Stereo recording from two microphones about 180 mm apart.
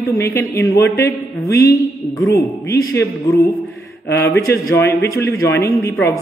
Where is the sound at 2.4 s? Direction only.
15° left (ahead or behind).